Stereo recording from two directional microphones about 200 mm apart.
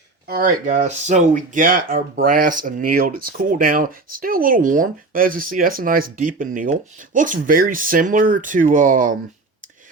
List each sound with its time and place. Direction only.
0.3 s speech: 45° right (ahead or behind)